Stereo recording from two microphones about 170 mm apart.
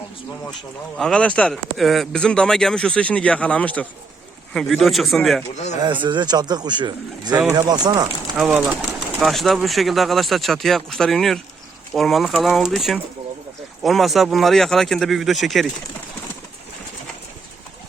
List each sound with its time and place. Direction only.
0.9 s speech: 5° left (ahead or behind)
5.8 s speech: 30° right (ahead or behind)
8.4 s speech: 5° right (ahead or behind)